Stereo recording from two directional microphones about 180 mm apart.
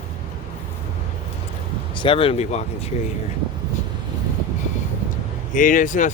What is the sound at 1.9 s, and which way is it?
Speech, 30° left (ahead or behind).